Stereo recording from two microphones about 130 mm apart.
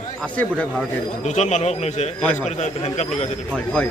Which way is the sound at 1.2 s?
60° left (ahead or behind).